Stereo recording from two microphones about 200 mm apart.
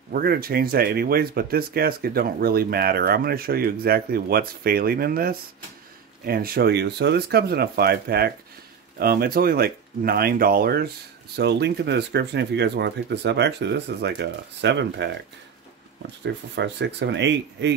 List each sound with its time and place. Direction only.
0.1 s speech: 50° right (ahead or behind)
16.3 s speech: 60° right (ahead or behind)